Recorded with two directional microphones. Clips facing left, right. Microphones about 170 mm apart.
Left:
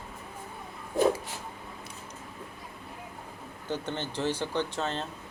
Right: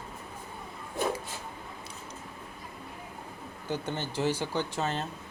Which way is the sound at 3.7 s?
10° right (ahead or behind).